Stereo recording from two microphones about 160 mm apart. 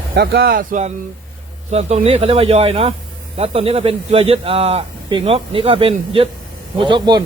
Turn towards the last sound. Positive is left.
turn(degrees=-30)  # may be behind; listen again after turning